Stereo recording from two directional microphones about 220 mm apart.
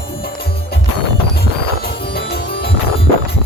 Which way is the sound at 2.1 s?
45° left (ahead or behind).